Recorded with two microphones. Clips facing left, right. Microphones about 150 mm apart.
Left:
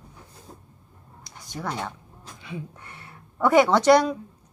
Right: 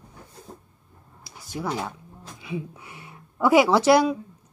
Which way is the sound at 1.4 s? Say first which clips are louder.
Right 2 dB; 5° right (ahead or behind).